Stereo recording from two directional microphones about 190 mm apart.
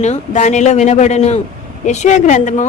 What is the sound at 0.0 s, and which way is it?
A woman's voice, 40° left (ahead or behind).